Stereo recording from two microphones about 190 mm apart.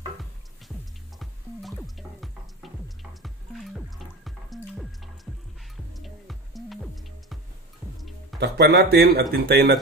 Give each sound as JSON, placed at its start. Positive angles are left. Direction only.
{"t": 1.2, "sound": "music", "side_deg": 0}
{"t": 8.4, "sound": "speech", "side_deg": -60}